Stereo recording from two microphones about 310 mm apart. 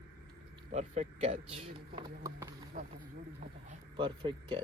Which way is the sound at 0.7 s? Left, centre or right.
Right.